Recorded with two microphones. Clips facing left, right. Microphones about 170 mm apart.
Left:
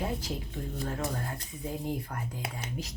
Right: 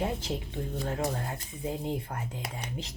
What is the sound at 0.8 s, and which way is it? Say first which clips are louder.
A woman's voice: right 2 dB; 20° right (ahead or behind).